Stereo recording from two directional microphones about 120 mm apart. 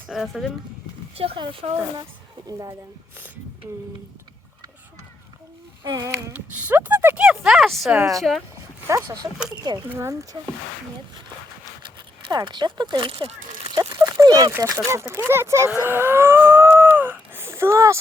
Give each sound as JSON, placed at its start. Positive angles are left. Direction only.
{"t": 0.1, "sound": "speech", "side_deg": 0}
{"t": 1.1, "sound": "speech", "side_deg": -55}
{"t": 2.5, "sound": "speech", "side_deg": -30}
{"t": 5.8, "sound": "speech", "side_deg": -30}
{"t": 6.7, "sound": "speech", "side_deg": -15}
{"t": 7.2, "sound": "speech", "side_deg": -5}
{"t": 8.9, "sound": "speech", "side_deg": -25}
{"t": 12.2, "sound": "speech", "side_deg": -40}
{"t": 13.7, "sound": "speech", "side_deg": -30}
{"t": 15.7, "sound": "moo", "side_deg": -15}